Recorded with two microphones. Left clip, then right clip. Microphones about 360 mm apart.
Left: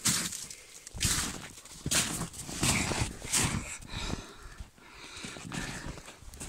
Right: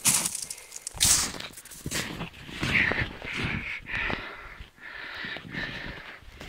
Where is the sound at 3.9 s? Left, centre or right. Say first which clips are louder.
Right 10 dB; right.